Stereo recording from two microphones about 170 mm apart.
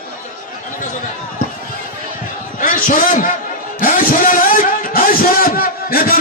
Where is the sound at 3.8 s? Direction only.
55° left (ahead or behind).